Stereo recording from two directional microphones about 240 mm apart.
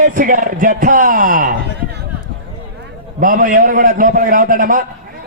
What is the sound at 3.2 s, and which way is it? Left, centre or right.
A man's voice, right.